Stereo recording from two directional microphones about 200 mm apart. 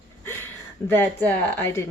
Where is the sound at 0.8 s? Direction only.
10° left (ahead or behind).